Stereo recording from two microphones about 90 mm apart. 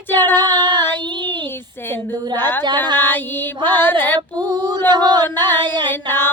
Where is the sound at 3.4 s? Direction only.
55° right (ahead or behind).